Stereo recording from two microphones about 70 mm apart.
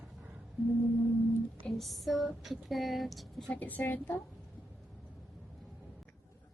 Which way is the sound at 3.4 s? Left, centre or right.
Left.